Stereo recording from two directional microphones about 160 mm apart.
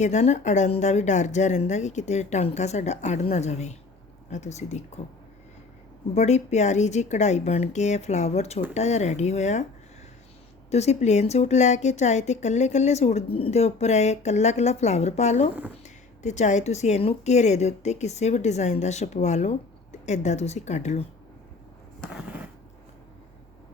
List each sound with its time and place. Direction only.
0.0 s speech: 45° left (ahead or behind)
6.1 s speech: 45° left (ahead or behind)
10.7 s speech: 45° left (ahead or behind)
22.0 s a sound: 5° right (ahead or behind)